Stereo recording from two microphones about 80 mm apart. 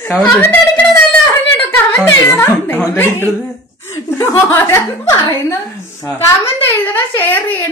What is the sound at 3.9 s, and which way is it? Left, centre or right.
Chuckle, left.